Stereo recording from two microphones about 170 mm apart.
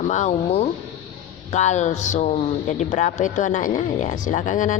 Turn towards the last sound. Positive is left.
turn(degrees=50)  # may be behind; listen again after turning